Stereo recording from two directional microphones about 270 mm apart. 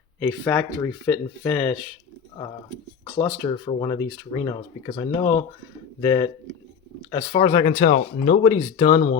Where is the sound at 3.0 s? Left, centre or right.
Centre.